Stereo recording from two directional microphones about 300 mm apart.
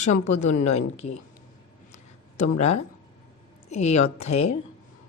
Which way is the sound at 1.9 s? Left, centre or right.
Left.